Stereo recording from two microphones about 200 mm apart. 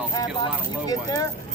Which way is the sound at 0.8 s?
20° left (ahead or behind).